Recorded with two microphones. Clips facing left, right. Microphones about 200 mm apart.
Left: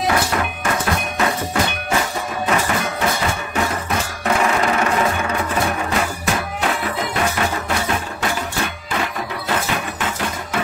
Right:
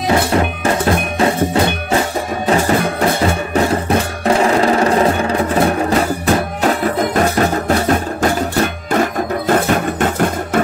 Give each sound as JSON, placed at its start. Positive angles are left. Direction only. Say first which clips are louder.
{"t": 0.1, "sound": "music", "louder": "right 6 dB", "side_deg": -30}